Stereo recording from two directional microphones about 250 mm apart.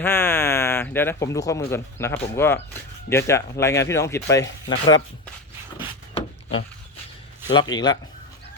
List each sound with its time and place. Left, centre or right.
0.0 s speech: centre
6.1 s a sound: left
7.5 s speech: centre